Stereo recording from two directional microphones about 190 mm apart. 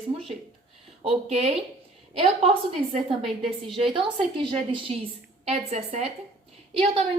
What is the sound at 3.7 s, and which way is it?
A woman's voice, 25° right (ahead or behind).